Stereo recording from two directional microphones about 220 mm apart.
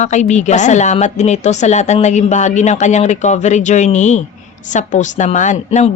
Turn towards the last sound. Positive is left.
turn(degrees=35)  # may be behind; listen again after turning